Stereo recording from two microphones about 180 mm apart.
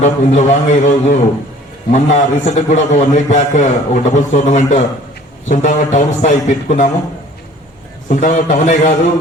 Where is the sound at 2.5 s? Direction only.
40° left (ahead or behind).